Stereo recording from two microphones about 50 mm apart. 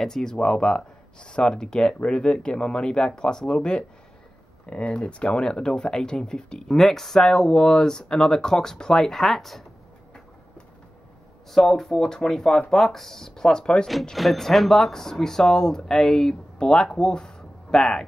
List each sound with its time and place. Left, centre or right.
0.0 s speech: centre
11.5 s speech: centre
14.1 s speech: centre